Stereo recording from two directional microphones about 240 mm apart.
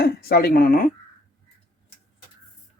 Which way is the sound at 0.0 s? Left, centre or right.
Left.